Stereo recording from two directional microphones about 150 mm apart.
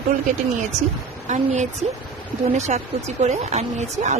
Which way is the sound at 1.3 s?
50° right (ahead or behind).